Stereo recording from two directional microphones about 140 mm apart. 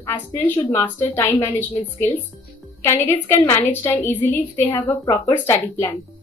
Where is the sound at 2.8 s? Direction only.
20° left (ahead or behind).